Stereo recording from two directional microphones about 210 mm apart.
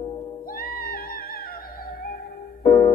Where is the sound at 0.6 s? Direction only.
45° left (ahead or behind).